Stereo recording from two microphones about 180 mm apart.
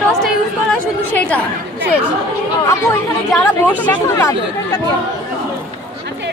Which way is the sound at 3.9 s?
15° left (ahead or behind).